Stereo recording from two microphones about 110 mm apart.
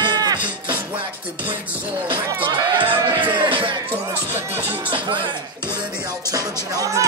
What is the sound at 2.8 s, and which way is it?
Music, 50° right (ahead or behind).